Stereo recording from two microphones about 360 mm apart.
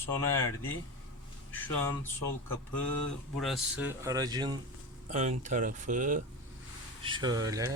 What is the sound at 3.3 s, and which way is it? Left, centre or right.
Speech, centre.